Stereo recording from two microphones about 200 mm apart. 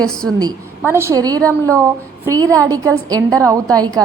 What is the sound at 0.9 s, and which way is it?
Speech, 10° right (ahead or behind).